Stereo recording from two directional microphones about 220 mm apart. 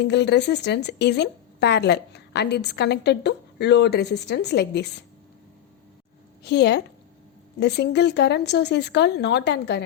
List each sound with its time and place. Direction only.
0.0 s speech: 50° left (ahead or behind)
6.4 s a woman's voice: 50° left (ahead or behind)